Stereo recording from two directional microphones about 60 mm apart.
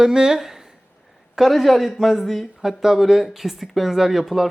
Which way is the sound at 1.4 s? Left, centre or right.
Centre.